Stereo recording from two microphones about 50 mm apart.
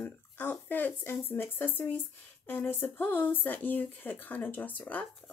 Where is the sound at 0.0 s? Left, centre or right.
Left.